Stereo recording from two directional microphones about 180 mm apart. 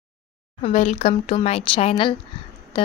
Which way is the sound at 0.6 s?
35° left (ahead or behind).